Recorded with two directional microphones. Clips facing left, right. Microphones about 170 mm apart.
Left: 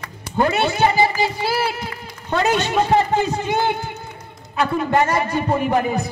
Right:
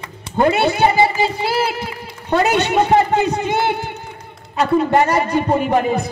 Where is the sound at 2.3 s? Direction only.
20° right (ahead or behind).